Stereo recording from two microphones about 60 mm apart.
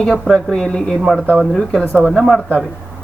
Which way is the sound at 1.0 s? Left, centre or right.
Centre.